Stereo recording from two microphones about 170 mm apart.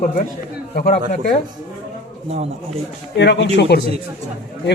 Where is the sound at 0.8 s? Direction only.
60° left (ahead or behind).